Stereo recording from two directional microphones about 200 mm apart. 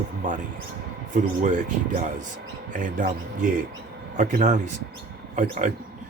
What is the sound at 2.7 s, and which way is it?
A man's voice, 40° right (ahead or behind).